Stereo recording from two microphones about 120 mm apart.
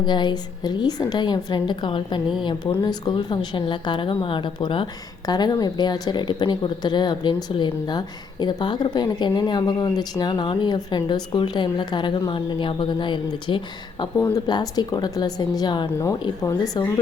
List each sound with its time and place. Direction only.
0.0 s speech: 40° left (ahead or behind)